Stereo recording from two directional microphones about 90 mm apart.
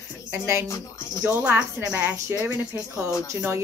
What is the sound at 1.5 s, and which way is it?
A woman's voice, 25° right (ahead or behind).